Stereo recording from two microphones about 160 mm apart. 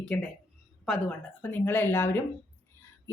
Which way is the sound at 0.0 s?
5° left (ahead or behind).